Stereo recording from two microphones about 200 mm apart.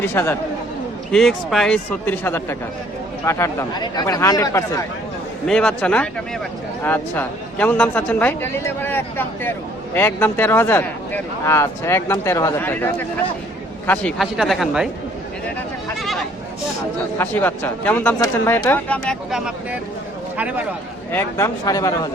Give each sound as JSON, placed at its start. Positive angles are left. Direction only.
{"t": 0.0, "sound": "speech", "side_deg": 10}
{"t": 1.1, "sound": "a man's voice", "side_deg": 0}
{"t": 5.5, "sound": "a man's voice", "side_deg": 5}
{"t": 16.0, "sound": "sheep", "side_deg": 0}
{"t": 17.2, "sound": "a man's voice", "side_deg": 10}
{"t": 21.1, "sound": "speech", "side_deg": 10}